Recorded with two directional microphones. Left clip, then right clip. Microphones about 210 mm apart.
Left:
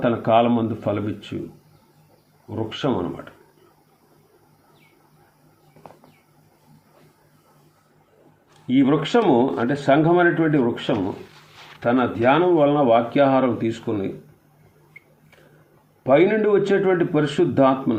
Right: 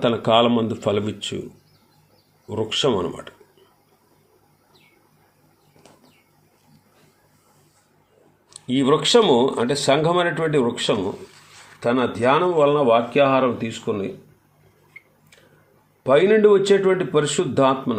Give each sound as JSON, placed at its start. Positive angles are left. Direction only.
{"t": 0.0, "sound": "speech", "side_deg": -35}
{"t": 2.5, "sound": "speech", "side_deg": -35}
{"t": 8.6, "sound": "speech", "side_deg": -40}
{"t": 13.1, "sound": "speech", "side_deg": -25}
{"t": 16.0, "sound": "speech", "side_deg": -30}